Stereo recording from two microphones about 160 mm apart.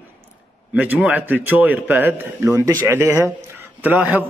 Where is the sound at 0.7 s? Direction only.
10° right (ahead or behind).